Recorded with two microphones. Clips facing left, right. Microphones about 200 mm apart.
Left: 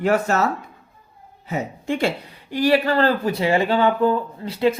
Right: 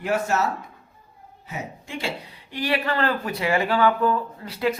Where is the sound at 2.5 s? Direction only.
40° left (ahead or behind).